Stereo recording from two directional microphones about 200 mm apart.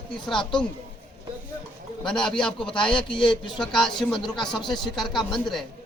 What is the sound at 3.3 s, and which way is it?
Speech, 25° left (ahead or behind).